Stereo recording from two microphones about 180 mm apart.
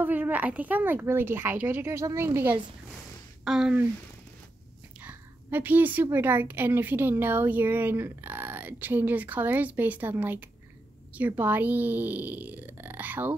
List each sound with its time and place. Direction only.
0.0 s a woman's voice: 10° right (ahead or behind)
3.4 s speech: 5° right (ahead or behind)
5.0 s a woman's voice: 10° right (ahead or behind)